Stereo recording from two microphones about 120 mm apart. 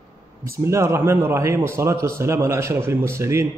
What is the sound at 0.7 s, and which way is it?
A man's voice, 20° right (ahead or behind).